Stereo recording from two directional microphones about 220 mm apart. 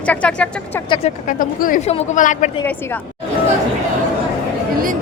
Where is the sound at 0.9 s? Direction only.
30° left (ahead or behind).